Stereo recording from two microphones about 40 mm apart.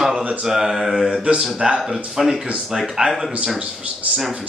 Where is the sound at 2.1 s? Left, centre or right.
Centre.